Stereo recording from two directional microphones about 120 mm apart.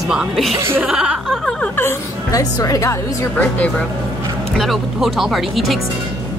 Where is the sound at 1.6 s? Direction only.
20° left (ahead or behind).